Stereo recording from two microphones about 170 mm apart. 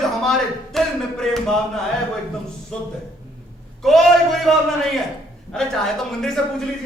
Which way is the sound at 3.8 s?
Centre (ahead or behind).